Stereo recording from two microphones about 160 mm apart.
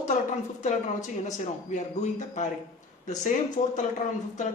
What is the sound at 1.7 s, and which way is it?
Speech, 50° left (ahead or behind).